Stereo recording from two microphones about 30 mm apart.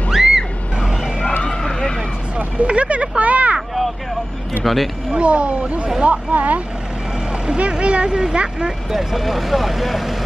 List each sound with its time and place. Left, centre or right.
0.1 s a sound: centre
2.3 s vehicle: right
3.5 s vehicle: centre
4.7 s speech: centre
5.1 s speech: right
6.0 s speech: right
7.8 s speech: right
8.9 s speech: centre